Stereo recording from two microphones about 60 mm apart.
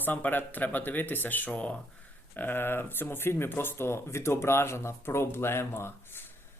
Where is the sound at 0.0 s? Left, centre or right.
Left.